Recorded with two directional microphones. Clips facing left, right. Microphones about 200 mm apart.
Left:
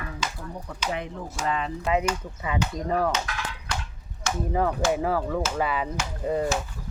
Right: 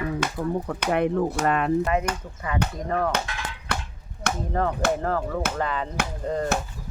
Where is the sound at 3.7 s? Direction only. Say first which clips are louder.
Right 4 dB; 60° right (ahead or behind).